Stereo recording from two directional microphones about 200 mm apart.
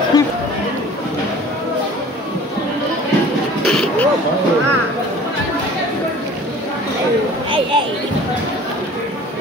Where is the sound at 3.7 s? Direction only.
Centre (ahead or behind).